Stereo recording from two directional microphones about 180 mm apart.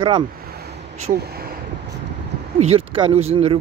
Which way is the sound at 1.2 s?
60° right (ahead or behind).